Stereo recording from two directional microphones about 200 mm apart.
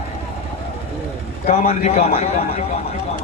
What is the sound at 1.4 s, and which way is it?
Speech, 35° left (ahead or behind).